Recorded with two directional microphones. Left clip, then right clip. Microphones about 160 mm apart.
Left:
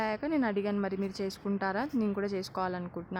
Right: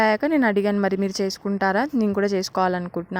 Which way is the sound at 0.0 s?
50° right (ahead or behind).